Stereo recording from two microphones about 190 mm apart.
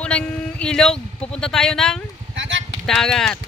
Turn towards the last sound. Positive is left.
turn(degrees=5)  # may be behind; listen again after turning